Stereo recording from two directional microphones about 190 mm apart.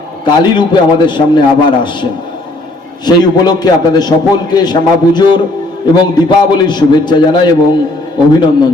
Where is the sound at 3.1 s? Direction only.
20° left (ahead or behind).